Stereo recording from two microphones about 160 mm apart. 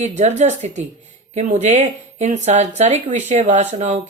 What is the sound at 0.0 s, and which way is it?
Speech, 45° right (ahead or behind).